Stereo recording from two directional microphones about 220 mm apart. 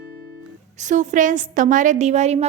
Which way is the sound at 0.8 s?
35° right (ahead or behind).